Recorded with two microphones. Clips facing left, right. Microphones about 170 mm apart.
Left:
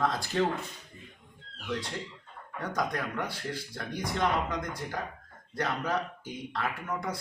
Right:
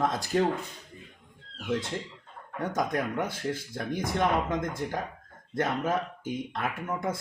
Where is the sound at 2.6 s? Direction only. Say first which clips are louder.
Right 3 dB; 20° right (ahead or behind).